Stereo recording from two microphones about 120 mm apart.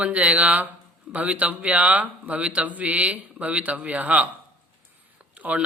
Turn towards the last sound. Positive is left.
turn(degrees=-10)  # may be behind; listen again after turning